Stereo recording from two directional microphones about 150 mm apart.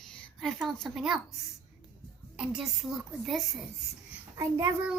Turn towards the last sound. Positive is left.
turn(degrees=-20)  # may be behind; listen again after turning